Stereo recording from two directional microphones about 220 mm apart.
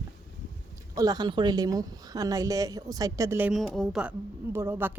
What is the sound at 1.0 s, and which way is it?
Speech, 20° right (ahead or behind).